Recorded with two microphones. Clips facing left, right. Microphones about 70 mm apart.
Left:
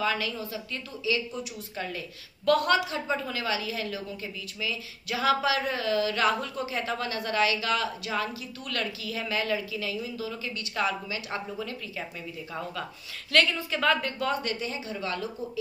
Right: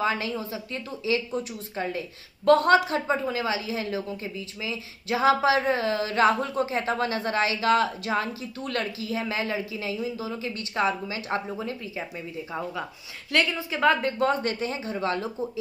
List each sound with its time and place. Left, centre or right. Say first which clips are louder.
0.0 s speech: right 2 dB; right
13.3 s speech: even; centre
14.1 s speech: right 5 dB; right